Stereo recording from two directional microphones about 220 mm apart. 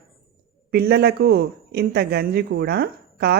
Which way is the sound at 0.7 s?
45° right (ahead or behind).